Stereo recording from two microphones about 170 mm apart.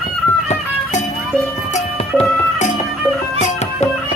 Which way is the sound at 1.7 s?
40° left (ahead or behind).